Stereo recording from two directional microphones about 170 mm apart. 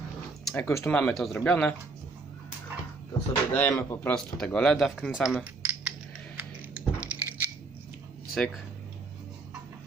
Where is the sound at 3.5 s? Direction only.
10° left (ahead or behind).